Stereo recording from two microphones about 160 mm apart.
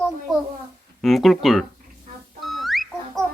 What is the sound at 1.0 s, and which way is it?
Speech, centre (ahead or behind).